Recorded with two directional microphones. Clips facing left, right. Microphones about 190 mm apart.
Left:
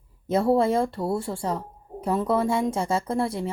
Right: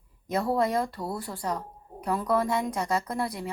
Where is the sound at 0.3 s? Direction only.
25° left (ahead or behind).